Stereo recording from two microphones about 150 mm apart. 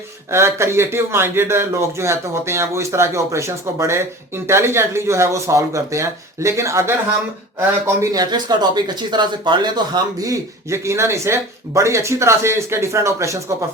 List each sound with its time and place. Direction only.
0.3 s a man's voice: 15° right (ahead or behind)
8.1 s speech: 25° right (ahead or behind)